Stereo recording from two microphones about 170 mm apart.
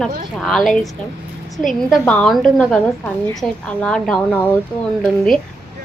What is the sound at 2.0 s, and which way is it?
A woman's voice, 5° left (ahead or behind).